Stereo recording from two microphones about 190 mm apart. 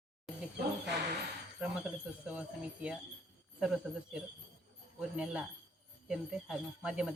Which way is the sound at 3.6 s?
5° right (ahead or behind).